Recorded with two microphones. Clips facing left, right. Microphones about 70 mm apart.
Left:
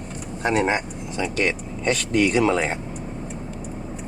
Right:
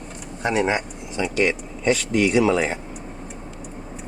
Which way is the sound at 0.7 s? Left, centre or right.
Centre.